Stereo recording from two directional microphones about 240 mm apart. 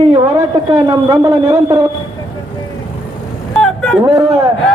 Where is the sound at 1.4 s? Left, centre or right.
Right.